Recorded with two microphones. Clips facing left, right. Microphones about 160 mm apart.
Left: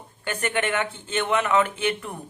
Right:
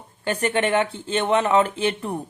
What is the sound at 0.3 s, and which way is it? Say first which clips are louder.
Speech: right 5 dB; 35° right (ahead or behind).